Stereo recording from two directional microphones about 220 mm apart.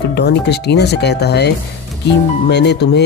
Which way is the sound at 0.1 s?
50° left (ahead or behind).